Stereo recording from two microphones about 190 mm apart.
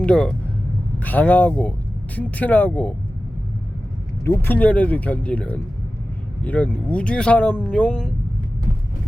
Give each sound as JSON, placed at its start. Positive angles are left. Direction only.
{"t": 0.0, "sound": "speech", "side_deg": 5}
{"t": 4.2, "sound": "speech", "side_deg": 10}